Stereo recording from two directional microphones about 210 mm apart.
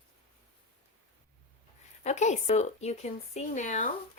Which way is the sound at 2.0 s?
35° left (ahead or behind).